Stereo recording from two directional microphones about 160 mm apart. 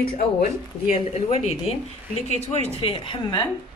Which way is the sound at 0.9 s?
40° left (ahead or behind).